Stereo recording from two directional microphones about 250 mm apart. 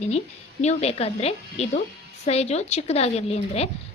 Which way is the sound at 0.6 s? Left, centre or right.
Left.